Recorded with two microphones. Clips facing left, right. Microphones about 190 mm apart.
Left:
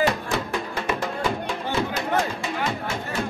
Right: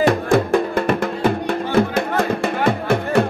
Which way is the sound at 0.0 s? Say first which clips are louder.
Right 8 dB; 55° right (ahead or behind).